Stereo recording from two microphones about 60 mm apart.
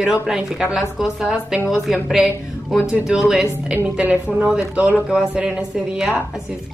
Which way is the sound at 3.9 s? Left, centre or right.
Right.